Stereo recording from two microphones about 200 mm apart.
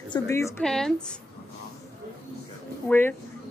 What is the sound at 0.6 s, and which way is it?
Speech, 5° left (ahead or behind).